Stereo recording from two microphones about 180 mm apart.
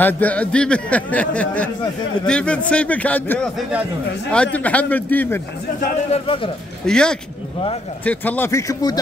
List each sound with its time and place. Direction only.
0.0 s speech: 10° left (ahead or behind)
6.1 s a man's voice: 30° left (ahead or behind)
6.9 s speech: 5° left (ahead or behind); by 9.0 s 20° left (ahead or behind)